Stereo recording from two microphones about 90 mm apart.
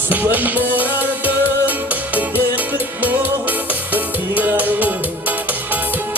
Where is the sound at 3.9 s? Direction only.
20° right (ahead or behind).